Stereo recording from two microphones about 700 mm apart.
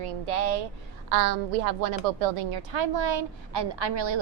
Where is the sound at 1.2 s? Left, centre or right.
Right.